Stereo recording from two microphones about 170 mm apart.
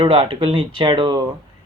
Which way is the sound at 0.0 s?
30° right (ahead or behind).